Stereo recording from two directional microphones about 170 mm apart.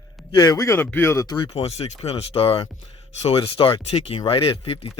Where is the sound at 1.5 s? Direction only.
40° left (ahead or behind).